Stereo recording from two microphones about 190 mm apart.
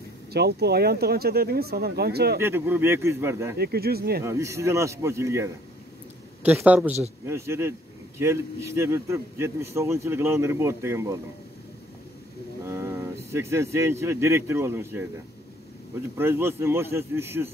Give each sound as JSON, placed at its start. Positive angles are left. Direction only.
{"t": 0.3, "sound": "speech", "side_deg": -60}
{"t": 2.4, "sound": "a man's voice", "side_deg": -10}
{"t": 3.5, "sound": "speech", "side_deg": -55}
{"t": 4.2, "sound": "a man's voice", "side_deg": -15}
{"t": 12.6, "sound": "speech", "side_deg": -15}
{"t": 16.2, "sound": "a man's voice", "side_deg": -10}